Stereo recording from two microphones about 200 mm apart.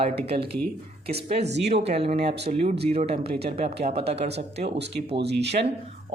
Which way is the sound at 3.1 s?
50° right (ahead or behind).